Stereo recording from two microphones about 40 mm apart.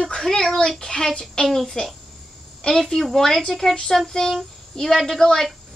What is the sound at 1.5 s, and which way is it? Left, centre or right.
A child's voice, centre.